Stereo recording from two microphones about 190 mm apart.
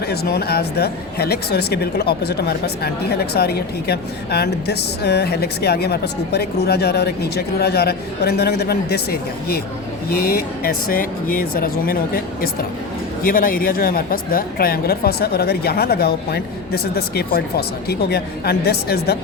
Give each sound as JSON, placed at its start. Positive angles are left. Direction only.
{"t": 0.1, "sound": "speech", "side_deg": 55}